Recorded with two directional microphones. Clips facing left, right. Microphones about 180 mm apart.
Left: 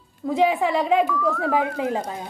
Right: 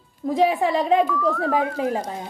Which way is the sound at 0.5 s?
15° left (ahead or behind).